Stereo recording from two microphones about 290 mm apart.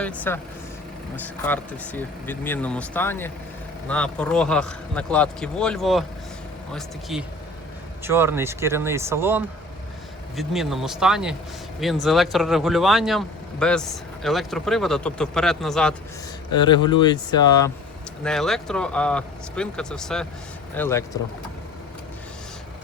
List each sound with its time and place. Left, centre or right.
0.3 s speech: centre
16.6 s speech: centre
18.2 s speech: centre